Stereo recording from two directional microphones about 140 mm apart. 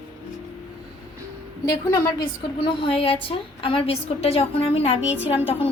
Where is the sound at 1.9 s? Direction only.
35° left (ahead or behind).